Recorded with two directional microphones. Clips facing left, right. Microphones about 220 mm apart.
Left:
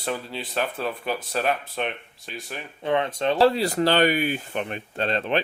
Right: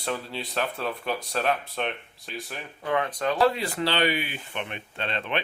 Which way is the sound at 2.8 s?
25° left (ahead or behind).